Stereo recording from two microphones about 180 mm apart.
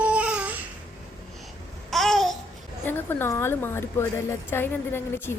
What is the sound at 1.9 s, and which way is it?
Babbling, centre (ahead or behind).